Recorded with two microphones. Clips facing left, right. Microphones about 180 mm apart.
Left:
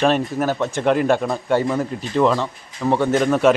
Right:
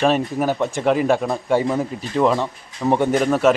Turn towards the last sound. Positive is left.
turn(degrees=-5)  # may be behind; listen again after turning